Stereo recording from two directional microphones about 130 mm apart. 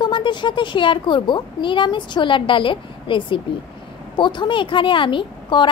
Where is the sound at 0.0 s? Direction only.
35° left (ahead or behind).